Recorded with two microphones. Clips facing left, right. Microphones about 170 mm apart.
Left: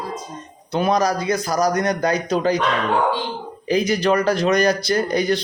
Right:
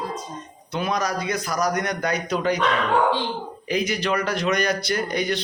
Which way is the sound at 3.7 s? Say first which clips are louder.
Left 6 dB; 35° left (ahead or behind).